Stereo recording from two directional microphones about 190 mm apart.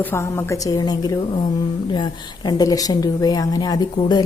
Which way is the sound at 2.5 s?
20° left (ahead or behind).